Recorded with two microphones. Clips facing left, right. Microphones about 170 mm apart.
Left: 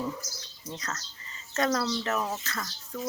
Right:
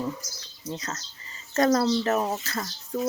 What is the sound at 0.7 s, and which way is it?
Speech, 25° right (ahead or behind).